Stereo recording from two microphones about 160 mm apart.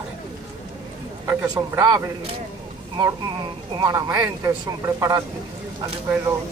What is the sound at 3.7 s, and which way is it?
Speech, 20° right (ahead or behind).